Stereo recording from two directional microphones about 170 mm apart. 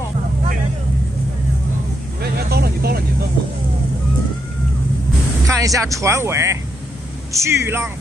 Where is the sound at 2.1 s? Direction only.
65° right (ahead or behind).